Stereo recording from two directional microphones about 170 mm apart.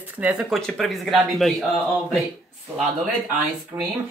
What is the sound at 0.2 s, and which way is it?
Speech, 5° right (ahead or behind).